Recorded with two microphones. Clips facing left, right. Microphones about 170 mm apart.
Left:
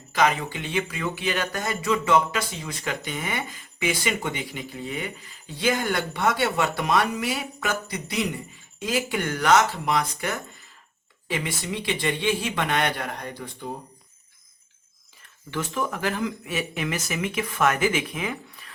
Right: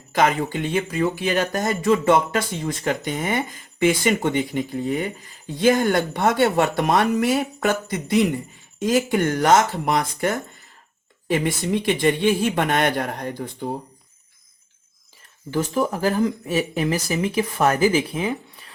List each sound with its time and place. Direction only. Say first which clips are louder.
0.1 s speech: right 3 dB; 50° right (ahead or behind)
15.4 s speech: right 6 dB; 35° right (ahead or behind)